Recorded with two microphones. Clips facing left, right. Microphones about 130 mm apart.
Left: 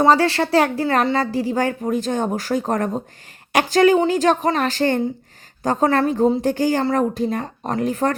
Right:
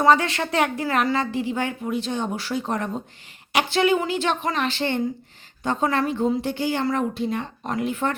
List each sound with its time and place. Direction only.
0.0 s a woman's voice: 35° left (ahead or behind)